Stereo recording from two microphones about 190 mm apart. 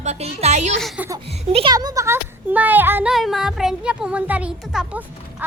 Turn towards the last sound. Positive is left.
turn(degrees=-5)  # may be behind; listen again after turning